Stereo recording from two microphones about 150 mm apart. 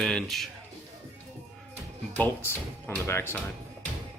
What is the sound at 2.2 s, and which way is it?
Speech, 15° left (ahead or behind).